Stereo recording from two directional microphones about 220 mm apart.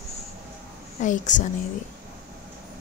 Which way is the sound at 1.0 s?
35° left (ahead or behind).